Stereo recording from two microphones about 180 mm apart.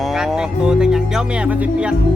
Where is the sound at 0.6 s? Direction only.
5° right (ahead or behind).